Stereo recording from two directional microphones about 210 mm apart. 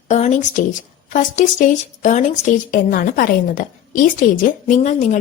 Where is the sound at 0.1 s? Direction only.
35° left (ahead or behind).